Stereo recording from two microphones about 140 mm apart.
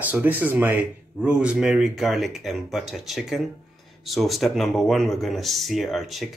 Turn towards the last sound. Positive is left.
turn(degrees=0)  # may be behind; listen again after turning